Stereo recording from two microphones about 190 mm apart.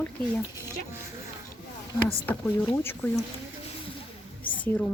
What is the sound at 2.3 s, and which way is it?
Speech, 10° left (ahead or behind).